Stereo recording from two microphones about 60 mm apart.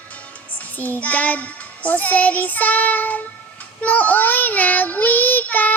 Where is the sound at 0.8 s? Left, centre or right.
Left.